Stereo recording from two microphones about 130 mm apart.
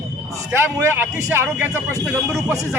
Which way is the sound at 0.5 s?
20° right (ahead or behind).